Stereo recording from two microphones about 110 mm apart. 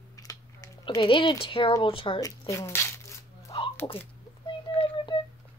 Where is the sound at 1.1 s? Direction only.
50° left (ahead or behind).